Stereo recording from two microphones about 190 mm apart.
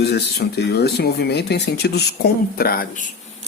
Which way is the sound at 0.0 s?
60° left (ahead or behind).